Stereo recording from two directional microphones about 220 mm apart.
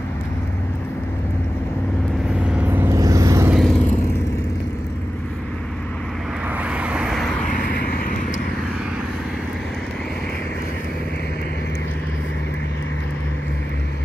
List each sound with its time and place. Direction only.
2.5 s vehicle: 10° right (ahead or behind)
3.5 s vehicle: 5° left (ahead or behind)
6.5 s vehicle: 5° right (ahead or behind)
7.5 s vehicle: 40° left (ahead or behind)